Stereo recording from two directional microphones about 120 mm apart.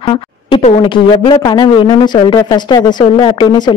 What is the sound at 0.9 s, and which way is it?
Speech, 40° left (ahead or behind).